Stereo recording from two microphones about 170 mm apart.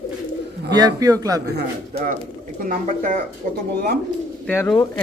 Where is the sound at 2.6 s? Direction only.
50° right (ahead or behind).